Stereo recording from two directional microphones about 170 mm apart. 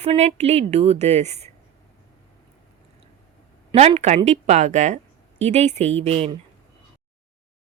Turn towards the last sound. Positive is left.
turn(degrees=-35)  # may be behind; listen again after turning